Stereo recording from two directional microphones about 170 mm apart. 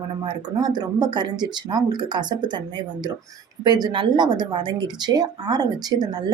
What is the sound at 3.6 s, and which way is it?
A woman's voice, 25° right (ahead or behind).